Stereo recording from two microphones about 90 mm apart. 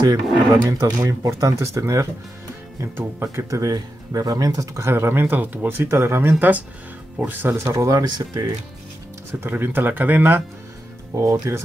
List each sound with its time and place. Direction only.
0.7 s speech: 40° right (ahead or behind); by 7.6 s 20° right (ahead or behind)
7.6 s speech: 35° right (ahead or behind)
9.3 s speech: 25° right (ahead or behind)
11.1 s speech: 35° right (ahead or behind)